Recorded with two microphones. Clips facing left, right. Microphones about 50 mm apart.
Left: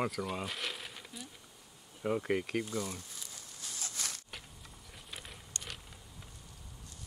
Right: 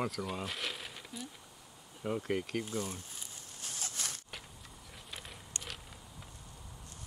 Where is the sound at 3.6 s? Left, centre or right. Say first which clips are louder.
Right 1 dB; right.